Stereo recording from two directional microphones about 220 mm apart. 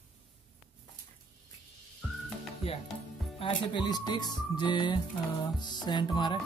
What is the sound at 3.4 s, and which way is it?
Speech, 20° left (ahead or behind).